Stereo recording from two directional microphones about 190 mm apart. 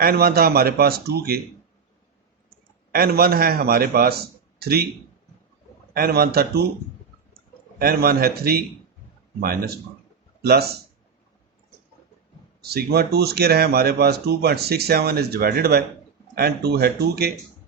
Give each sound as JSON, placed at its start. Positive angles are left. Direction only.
{"t": 0.0, "sound": "speech", "side_deg": -50}
{"t": 2.9, "sound": "speech", "side_deg": -55}
{"t": 5.9, "sound": "speech", "side_deg": -55}
{"t": 7.8, "sound": "speech", "side_deg": -55}
{"t": 12.6, "sound": "speech", "side_deg": -55}